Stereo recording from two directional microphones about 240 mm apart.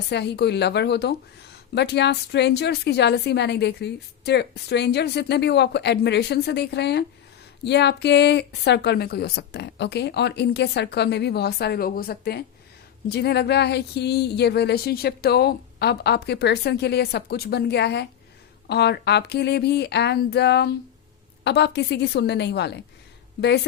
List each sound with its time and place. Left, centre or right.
0.1 s a woman's voice: left